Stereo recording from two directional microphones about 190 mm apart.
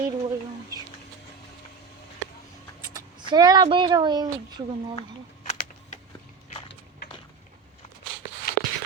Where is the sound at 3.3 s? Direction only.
20° right (ahead or behind).